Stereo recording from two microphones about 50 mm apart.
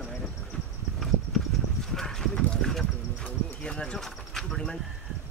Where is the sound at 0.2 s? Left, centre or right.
Centre.